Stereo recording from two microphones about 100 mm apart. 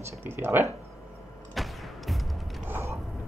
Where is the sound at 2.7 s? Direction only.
20° right (ahead or behind).